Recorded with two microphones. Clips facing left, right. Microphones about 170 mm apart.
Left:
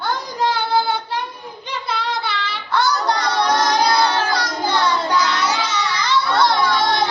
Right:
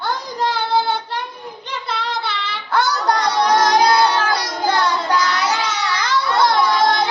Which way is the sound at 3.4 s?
45° right (ahead or behind).